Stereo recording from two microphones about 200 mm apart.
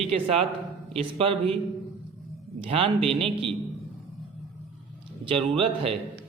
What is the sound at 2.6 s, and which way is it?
Speech, 30° right (ahead or behind).